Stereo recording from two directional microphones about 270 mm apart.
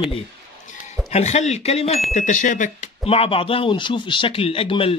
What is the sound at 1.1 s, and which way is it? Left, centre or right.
Speech, left.